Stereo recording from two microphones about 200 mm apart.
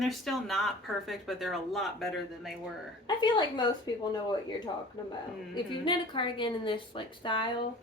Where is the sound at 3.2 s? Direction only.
20° left (ahead or behind).